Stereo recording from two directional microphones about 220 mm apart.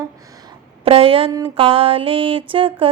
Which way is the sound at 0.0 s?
20° right (ahead or behind).